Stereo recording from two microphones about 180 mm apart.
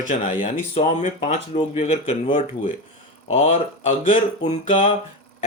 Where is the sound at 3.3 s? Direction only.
35° left (ahead or behind).